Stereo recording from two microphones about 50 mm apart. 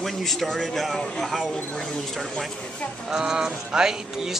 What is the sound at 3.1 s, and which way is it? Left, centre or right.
Speech, centre.